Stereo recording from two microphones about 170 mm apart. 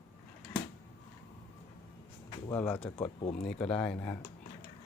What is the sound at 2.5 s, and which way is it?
Speech, 10° left (ahead or behind).